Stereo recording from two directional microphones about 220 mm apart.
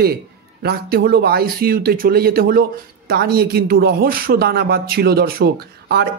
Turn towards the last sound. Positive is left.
turn(degrees=-45)  # may be behind; listen again after turning